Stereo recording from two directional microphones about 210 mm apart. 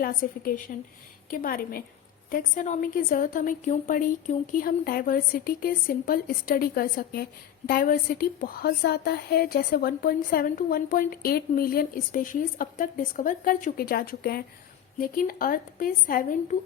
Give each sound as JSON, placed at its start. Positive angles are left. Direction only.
{"t": 0.0, "sound": "a woman's voice", "side_deg": 45}